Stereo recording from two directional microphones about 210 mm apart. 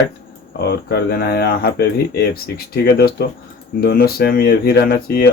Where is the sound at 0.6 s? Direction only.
50° left (ahead or behind).